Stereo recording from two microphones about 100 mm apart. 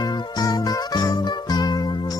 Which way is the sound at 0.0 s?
40° left (ahead or behind).